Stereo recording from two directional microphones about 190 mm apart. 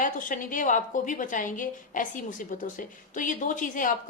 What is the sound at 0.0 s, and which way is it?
A woman's voice, 45° left (ahead or behind).